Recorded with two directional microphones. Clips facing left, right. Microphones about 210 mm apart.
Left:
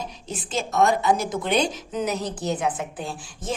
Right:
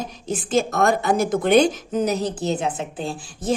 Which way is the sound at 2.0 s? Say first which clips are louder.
Right 3 dB; 30° right (ahead or behind).